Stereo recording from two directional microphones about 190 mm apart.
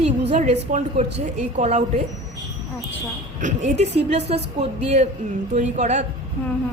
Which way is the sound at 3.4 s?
40° right (ahead or behind).